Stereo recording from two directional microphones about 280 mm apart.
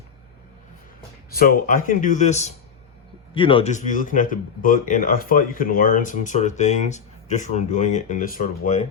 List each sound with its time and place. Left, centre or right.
1.3 s speech: left